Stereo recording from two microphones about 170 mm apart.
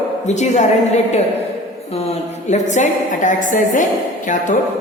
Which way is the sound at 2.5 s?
45° left (ahead or behind).